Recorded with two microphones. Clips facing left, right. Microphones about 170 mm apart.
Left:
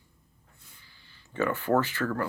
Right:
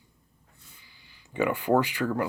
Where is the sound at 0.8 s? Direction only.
15° right (ahead or behind).